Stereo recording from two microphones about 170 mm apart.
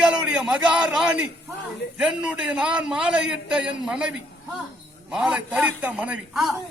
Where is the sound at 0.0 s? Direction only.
5° right (ahead or behind).